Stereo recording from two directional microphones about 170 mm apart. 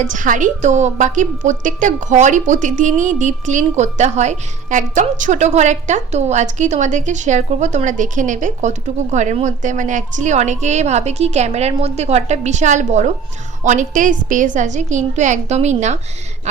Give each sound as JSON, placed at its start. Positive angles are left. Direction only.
{"t": 0.0, "sound": "a woman's voice", "side_deg": -50}